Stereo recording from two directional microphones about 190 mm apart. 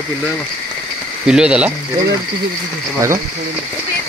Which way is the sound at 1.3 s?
5° right (ahead or behind).